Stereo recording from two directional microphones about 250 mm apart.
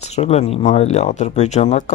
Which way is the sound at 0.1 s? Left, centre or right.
Left.